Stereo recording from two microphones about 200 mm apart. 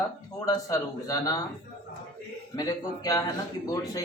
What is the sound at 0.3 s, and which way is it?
A man's voice, 15° left (ahead or behind).